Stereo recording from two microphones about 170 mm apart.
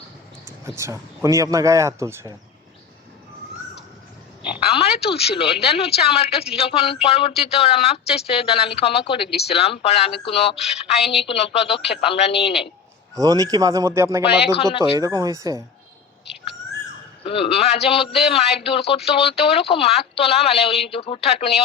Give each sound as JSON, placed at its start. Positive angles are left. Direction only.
{"t": 0.6, "sound": "speech", "side_deg": -15}
{"t": 4.6, "sound": "a sound", "side_deg": 35}
{"t": 5.3, "sound": "a woman's voice", "side_deg": 35}
{"t": 11.0, "sound": "a woman's voice", "side_deg": 0}
{"t": 11.3, "sound": "a woman's voice", "side_deg": 35}
{"t": 13.1, "sound": "speech", "side_deg": -20}
{"t": 14.5, "sound": "a woman's voice", "side_deg": 30}
{"t": 14.9, "sound": "speech", "side_deg": -20}
{"t": 17.2, "sound": "a woman's voice", "side_deg": 35}